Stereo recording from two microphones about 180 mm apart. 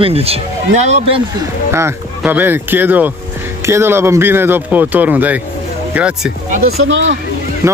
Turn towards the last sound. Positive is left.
turn(degrees=-15)  # may be behind; listen again after turning